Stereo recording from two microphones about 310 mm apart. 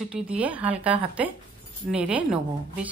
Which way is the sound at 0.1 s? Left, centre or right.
Centre.